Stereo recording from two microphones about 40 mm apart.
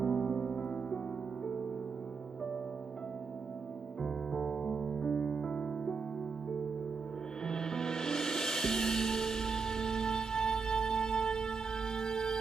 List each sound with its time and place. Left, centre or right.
0.0 s music: centre
4.0 s music: centre
7.4 s music: centre